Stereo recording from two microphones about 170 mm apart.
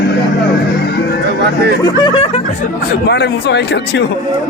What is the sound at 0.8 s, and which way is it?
Speech, 75° left (ahead or behind).